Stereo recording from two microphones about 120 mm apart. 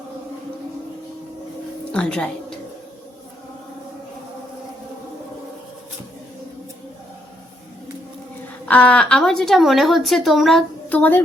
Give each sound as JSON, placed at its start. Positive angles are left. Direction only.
{"t": 1.9, "sound": "a woman's voice", "side_deg": 10}
{"t": 8.6, "sound": "a woman's voice", "side_deg": 10}
{"t": 10.8, "sound": "a woman's voice", "side_deg": 15}